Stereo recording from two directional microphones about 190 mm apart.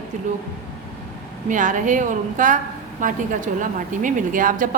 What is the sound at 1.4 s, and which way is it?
A woman's voice, 40° right (ahead or behind).